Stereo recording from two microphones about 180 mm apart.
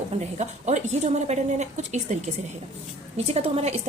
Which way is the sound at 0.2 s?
40° right (ahead or behind).